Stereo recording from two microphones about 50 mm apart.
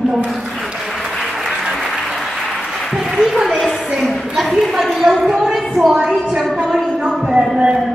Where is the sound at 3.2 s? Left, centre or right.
Centre.